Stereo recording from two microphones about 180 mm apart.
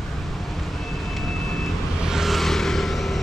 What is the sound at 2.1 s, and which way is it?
Vehicle, centre (ahead or behind).